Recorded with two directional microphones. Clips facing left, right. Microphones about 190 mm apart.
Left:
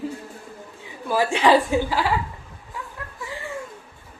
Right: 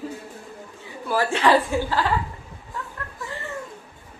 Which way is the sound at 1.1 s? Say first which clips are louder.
Left 1 dB; 15° left (ahead or behind).